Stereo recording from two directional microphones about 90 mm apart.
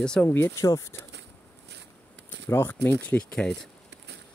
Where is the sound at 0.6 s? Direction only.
35° left (ahead or behind).